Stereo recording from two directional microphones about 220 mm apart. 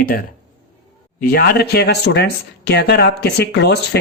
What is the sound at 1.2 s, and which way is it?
Speech, 45° left (ahead or behind).